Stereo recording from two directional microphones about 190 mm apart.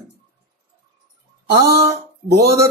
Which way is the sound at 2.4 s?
15° right (ahead or behind).